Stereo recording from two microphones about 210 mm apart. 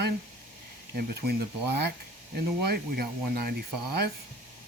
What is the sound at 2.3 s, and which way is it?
Speech, 45° right (ahead or behind).